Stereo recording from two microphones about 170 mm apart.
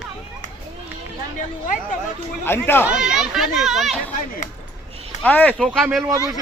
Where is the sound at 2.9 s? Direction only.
5° right (ahead or behind).